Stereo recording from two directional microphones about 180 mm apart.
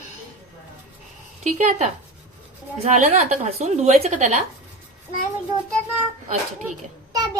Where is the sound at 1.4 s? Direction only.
40° right (ahead or behind).